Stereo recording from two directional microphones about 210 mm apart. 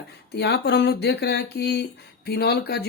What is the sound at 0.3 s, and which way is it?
Speech, 50° left (ahead or behind).